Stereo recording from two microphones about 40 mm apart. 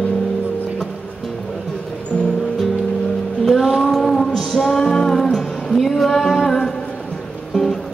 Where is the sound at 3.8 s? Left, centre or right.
Centre.